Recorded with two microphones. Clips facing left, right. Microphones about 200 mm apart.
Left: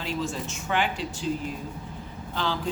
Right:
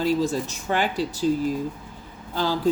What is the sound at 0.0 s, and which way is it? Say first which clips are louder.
Speech: right 8 dB; 40° right (ahead or behind).